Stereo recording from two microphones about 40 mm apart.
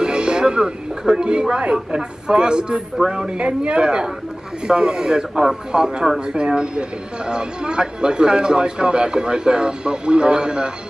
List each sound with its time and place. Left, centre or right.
0.0 s speech: right